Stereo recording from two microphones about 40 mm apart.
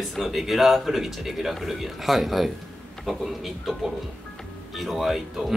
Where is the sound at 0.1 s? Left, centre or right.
Centre.